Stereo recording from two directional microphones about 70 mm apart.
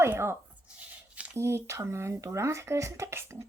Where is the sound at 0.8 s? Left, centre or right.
Centre.